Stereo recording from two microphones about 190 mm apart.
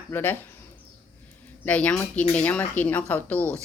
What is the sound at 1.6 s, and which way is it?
Speech, 5° left (ahead or behind).